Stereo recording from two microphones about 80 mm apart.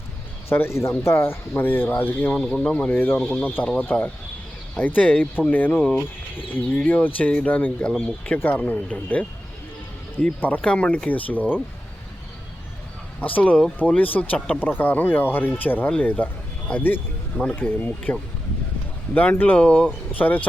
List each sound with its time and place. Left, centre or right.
0.4 s speech: left; by 2.9 s centre
2.9 s speech: left
10.4 s speech: centre
13.1 s speech: centre